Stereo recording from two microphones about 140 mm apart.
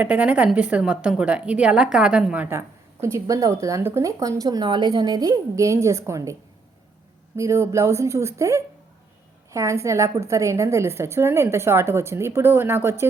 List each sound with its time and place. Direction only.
0.0 s a woman's voice: 10° right (ahead or behind)
7.3 s a woman's voice: 20° right (ahead or behind)